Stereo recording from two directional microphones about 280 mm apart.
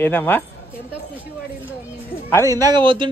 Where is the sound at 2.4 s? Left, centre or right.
Centre.